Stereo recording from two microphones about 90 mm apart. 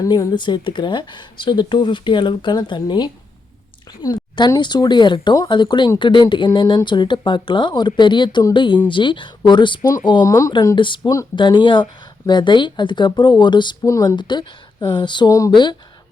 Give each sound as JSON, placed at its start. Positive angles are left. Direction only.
{"t": 0.0, "sound": "a woman's voice", "side_deg": 45}
{"t": 10.2, "sound": "speech", "side_deg": 35}
{"t": 10.8, "sound": "speech", "side_deg": 65}
{"t": 13.8, "sound": "speech", "side_deg": 35}
{"t": 14.2, "sound": "speech", "side_deg": 60}
{"t": 15.3, "sound": "speech", "side_deg": 40}